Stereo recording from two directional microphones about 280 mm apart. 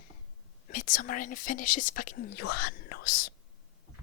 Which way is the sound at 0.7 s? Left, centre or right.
Left.